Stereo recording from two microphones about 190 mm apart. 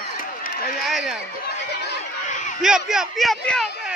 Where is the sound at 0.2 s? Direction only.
50° left (ahead or behind).